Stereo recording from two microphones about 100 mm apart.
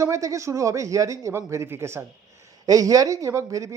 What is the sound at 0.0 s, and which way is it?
A man's voice, 30° right (ahead or behind).